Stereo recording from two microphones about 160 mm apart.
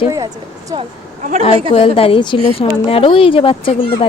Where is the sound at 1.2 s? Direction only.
55° right (ahead or behind).